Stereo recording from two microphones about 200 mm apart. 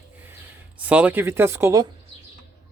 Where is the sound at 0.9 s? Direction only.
10° right (ahead or behind).